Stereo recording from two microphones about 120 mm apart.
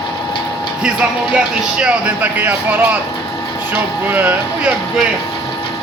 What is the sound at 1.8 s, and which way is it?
Speech, 10° right (ahead or behind).